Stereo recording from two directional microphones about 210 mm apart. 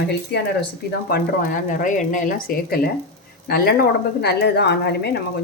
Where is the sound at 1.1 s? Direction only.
45° left (ahead or behind).